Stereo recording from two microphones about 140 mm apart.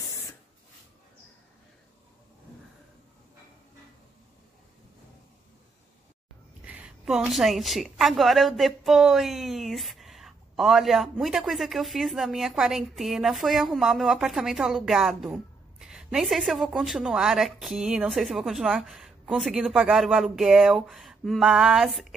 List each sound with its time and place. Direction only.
6.6 s a woman's voice: 10° right (ahead or behind)